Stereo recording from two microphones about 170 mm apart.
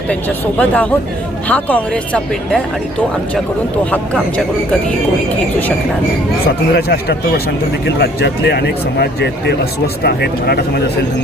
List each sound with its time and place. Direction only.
0.6 s speech: 10° left (ahead or behind)
3.9 s speech: 5° left (ahead or behind)
6.7 s speech: 70° left (ahead or behind)